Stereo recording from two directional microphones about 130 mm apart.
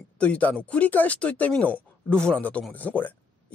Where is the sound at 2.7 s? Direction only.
10° left (ahead or behind).